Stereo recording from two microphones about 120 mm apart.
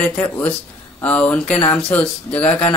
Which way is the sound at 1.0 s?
15° left (ahead or behind).